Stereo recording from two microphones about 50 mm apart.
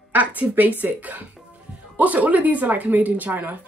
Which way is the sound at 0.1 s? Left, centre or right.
Right.